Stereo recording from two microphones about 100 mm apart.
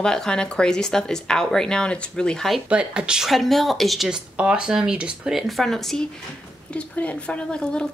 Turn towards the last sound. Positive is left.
turn(degrees=15)  # may be behind; listen again after turning